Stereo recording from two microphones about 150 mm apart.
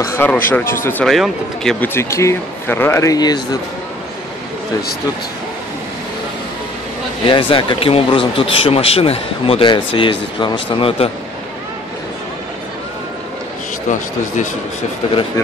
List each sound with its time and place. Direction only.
0.0 s speech: 15° left (ahead or behind)
1.0 s speech: centre (ahead or behind)
2.0 s speech: 20° left (ahead or behind)
7.2 s speech: 35° left (ahead or behind)
13.8 s speech: 55° left (ahead or behind)